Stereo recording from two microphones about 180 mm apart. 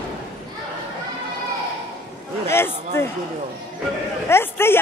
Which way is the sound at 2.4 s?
15° left (ahead or behind).